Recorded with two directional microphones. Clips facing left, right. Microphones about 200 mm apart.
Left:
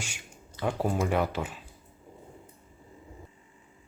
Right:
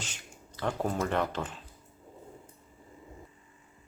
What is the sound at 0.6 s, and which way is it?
Speech, 10° left (ahead or behind).